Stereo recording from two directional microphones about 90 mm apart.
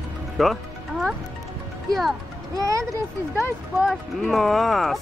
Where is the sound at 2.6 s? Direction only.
40° right (ahead or behind).